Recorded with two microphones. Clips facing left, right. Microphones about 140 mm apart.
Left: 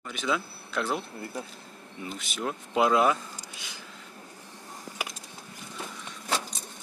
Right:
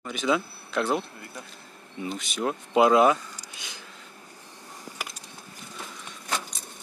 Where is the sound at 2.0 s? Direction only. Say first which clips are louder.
Right 5 dB; centre (ahead or behind).